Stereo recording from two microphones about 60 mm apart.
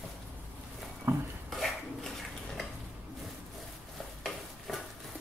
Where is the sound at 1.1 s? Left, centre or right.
Right.